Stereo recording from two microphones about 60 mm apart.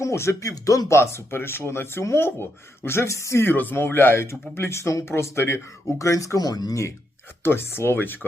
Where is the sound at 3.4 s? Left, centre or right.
Left.